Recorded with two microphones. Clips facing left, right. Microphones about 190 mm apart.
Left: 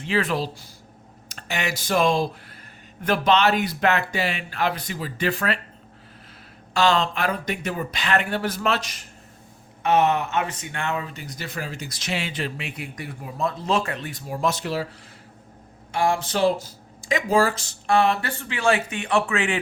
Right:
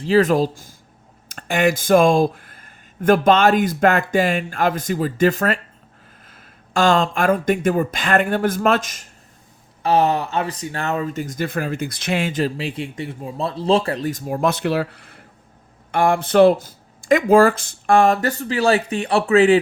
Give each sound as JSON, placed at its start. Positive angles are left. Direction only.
{"t": 0.0, "sound": "speech", "side_deg": -40}
{"t": 6.7, "sound": "speech", "side_deg": -50}
{"t": 9.8, "sound": "speech", "side_deg": -35}